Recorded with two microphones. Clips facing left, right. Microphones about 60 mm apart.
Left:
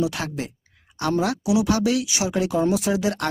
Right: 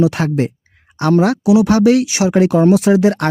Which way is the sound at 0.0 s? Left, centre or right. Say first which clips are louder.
Right 10 dB; right.